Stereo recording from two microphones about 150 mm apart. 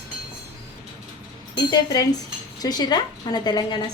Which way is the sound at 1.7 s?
25° left (ahead or behind).